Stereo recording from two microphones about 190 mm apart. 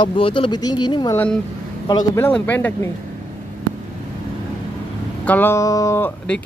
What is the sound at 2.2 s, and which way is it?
Speech, 10° left (ahead or behind).